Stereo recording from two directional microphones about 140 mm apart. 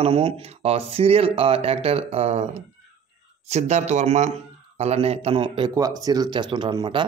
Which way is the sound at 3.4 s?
55° right (ahead or behind).